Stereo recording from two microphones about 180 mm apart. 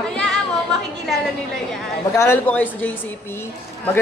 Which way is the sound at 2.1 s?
15° left (ahead or behind).